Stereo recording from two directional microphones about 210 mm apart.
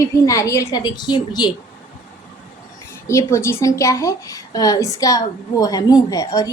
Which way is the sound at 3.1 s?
15° left (ahead or behind).